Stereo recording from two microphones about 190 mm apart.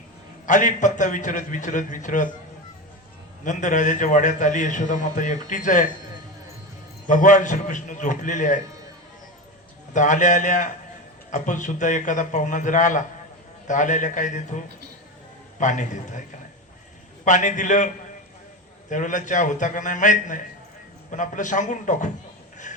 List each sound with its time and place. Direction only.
0.4 s a man's voice: 40° left (ahead or behind)
3.4 s a man's voice: 40° left (ahead or behind)
7.1 s a man's voice: 40° left (ahead or behind)
9.9 s a man's voice: 40° left (ahead or behind)
17.2 s a man's voice: 40° left (ahead or behind)
22.7 s music: 40° left (ahead or behind)